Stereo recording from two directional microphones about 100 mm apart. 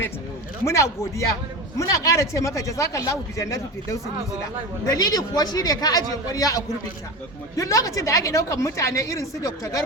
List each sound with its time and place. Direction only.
0.6 s a woman's voice: 30° left (ahead or behind)